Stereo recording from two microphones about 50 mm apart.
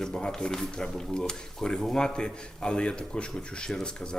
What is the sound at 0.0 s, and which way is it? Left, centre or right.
Speech, centre.